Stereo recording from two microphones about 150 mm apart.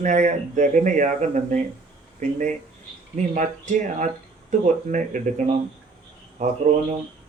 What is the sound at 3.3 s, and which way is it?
Speech, 55° right (ahead or behind).